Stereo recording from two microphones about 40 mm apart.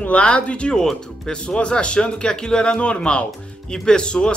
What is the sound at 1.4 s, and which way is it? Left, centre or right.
Speech, left.